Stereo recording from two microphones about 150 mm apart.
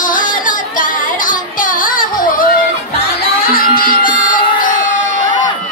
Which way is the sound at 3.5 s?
75° left (ahead or behind).